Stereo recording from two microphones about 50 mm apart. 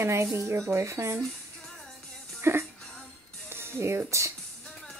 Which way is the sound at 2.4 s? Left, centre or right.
Right.